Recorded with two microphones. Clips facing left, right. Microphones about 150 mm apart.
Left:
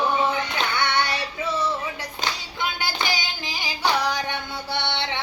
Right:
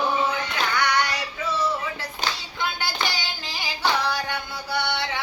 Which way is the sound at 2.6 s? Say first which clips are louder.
Even; 15° left (ahead or behind).